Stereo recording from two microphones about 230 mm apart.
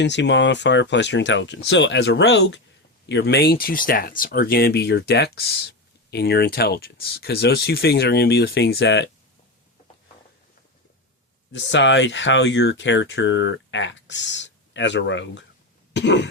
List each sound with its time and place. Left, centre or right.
0.0 s speech: left
11.5 s speech: left
15.9 s throat clearing: left